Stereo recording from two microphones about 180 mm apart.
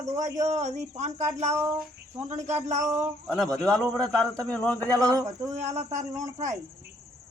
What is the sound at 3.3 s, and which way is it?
A man's voice, centre (ahead or behind).